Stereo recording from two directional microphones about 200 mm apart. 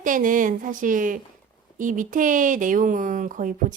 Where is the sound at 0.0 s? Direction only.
40° right (ahead or behind).